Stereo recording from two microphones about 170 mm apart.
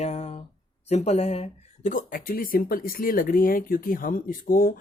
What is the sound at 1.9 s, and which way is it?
Speech, 55° left (ahead or behind).